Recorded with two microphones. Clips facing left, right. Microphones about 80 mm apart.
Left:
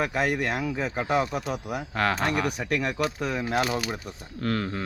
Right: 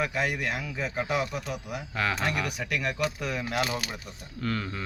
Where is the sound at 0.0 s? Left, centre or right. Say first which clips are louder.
Left 3 dB; left.